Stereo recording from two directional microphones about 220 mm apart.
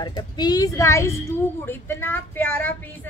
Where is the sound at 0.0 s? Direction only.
20° left (ahead or behind).